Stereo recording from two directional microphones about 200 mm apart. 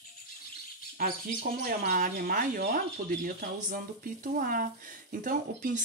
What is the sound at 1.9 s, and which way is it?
Speech, 45° right (ahead or behind).